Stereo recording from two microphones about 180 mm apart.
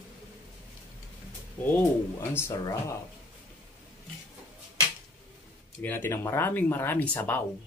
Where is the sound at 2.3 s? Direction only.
15° left (ahead or behind).